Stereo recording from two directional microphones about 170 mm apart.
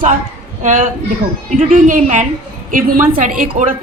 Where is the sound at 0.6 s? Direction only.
50° right (ahead or behind).